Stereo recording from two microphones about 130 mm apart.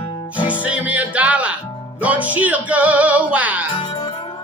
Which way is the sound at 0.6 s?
10° right (ahead or behind).